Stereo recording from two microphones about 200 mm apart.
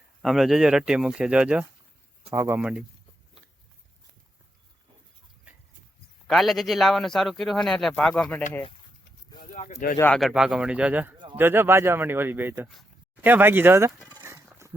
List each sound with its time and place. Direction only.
0.2 s a man's voice: centre (ahead or behind)
6.2 s a man's voice: centre (ahead or behind)
9.5 s speech: 40° left (ahead or behind)
10.0 s a man's voice: 5° left (ahead or behind); by 14.1 s 10° right (ahead or behind)
14.2 s a sound: 10° right (ahead or behind)